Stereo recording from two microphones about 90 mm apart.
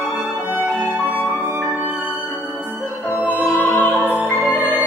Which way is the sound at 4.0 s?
15° right (ahead or behind).